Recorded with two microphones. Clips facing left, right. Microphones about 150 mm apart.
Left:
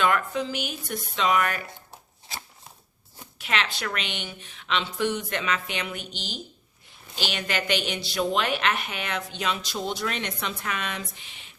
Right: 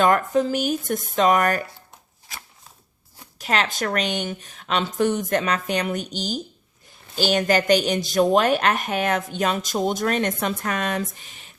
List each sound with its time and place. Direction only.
0.0 s a woman's voice: 40° right (ahead or behind)
3.3 s a woman's voice: 40° right (ahead or behind)